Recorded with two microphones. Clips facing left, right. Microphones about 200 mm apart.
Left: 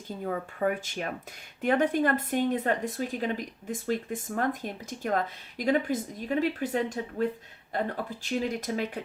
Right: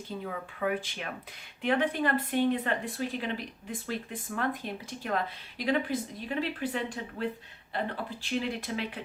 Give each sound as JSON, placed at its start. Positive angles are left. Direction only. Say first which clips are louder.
{"t": 0.3, "sound": "speech", "louder": "left 4 dB", "side_deg": 45}